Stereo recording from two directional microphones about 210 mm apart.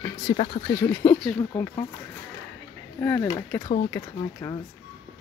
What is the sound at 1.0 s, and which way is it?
Speech, 10° left (ahead or behind).